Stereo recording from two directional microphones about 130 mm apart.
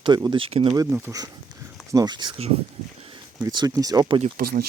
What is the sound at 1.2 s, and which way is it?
Speech, 30° right (ahead or behind).